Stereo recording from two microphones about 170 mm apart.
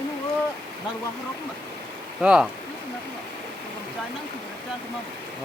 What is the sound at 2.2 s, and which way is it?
Speech, 5° right (ahead or behind).